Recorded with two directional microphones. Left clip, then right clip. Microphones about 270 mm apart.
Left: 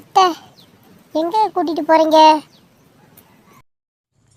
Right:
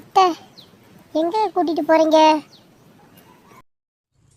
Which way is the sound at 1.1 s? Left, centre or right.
Centre.